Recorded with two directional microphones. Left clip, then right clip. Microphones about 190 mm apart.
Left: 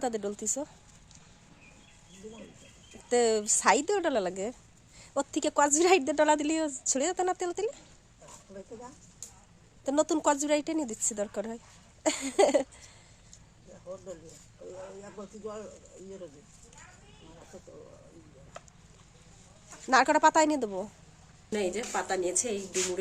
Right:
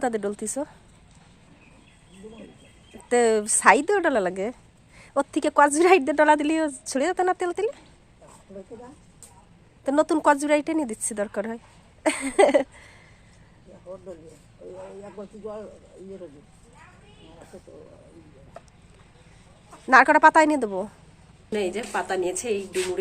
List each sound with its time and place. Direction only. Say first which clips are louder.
0.0 s a woman's voice: right 6 dB; 5° right (ahead or behind)
3.1 s a woman's voice: right 5 dB; 5° right (ahead or behind)
9.8 s a woman's voice: right 7 dB; centre (ahead or behind)
15.2 s speech: right 4 dB; 20° left (ahead or behind)
19.9 s a woman's voice: right 8 dB; centre (ahead or behind)
21.5 s a woman's voice: right 5 dB; 10° left (ahead or behind)